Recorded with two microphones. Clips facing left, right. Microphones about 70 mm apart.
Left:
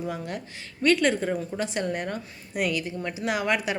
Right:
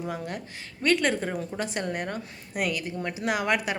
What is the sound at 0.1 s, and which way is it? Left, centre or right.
A woman's voice, right.